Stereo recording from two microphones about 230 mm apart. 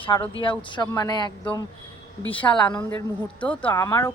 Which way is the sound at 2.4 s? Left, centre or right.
Centre.